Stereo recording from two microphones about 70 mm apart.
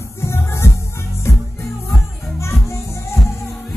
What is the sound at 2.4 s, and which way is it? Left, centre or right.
Music, left.